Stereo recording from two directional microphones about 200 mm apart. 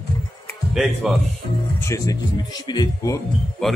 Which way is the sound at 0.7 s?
5° right (ahead or behind).